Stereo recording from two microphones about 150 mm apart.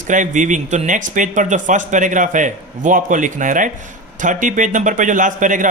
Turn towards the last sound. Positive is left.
turn(degrees=-60)  # may be behind; listen again after turning